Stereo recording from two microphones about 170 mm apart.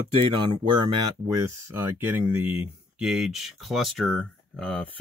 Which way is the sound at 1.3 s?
15° right (ahead or behind).